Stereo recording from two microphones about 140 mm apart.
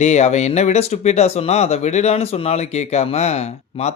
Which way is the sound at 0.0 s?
55° left (ahead or behind).